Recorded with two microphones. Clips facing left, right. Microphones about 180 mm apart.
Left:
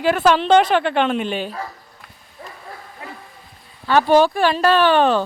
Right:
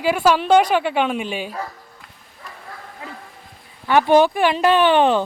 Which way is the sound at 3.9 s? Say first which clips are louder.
Even; 20° right (ahead or behind).